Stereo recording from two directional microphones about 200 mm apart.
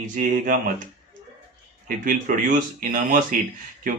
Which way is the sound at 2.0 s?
40° right (ahead or behind).